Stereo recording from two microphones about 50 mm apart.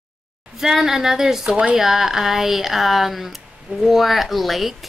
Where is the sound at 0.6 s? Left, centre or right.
Centre.